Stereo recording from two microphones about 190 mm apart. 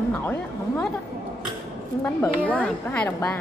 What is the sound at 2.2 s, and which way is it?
A woman's voice, 5° left (ahead or behind).